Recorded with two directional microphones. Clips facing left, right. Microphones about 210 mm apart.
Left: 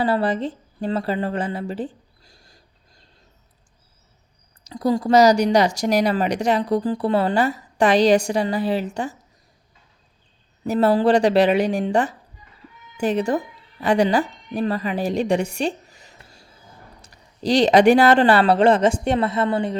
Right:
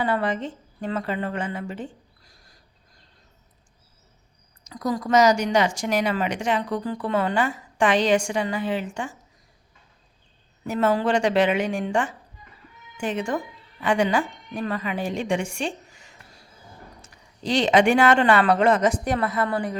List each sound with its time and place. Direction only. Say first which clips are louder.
0.0 s speech: left 4 dB; 35° left (ahead or behind)
4.6 s speech: left 6 dB; 30° left (ahead or behind)
10.7 s a woman's voice: left 5 dB; 35° left (ahead or behind)